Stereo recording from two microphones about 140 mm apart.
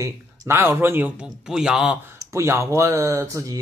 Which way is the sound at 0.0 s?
20° right (ahead or behind).